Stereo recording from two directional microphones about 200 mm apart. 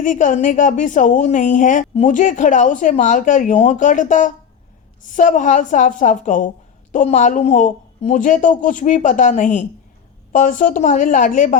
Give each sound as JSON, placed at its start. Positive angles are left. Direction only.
{"t": 0.0, "sound": "a woman's voice", "side_deg": 40}